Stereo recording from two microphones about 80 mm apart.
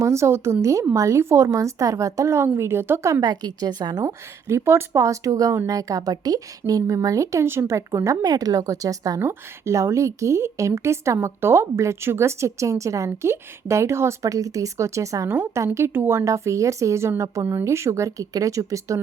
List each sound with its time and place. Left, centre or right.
0.0 s speech: right
3.1 s a woman's voice: right
4.0 s a woman's voice: right
7.4 s speech: right
8.2 s a woman's voice: right